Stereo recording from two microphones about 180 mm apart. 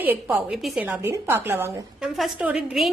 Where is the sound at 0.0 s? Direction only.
10° right (ahead or behind).